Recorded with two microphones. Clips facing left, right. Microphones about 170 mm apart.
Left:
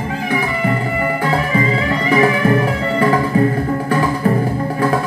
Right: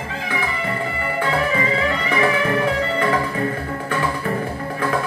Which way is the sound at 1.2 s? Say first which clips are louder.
Left 1 dB; 35° left (ahead or behind).